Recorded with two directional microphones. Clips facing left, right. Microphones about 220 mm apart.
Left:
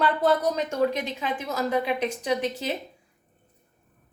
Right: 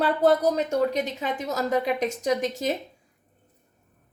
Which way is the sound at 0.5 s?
40° right (ahead or behind).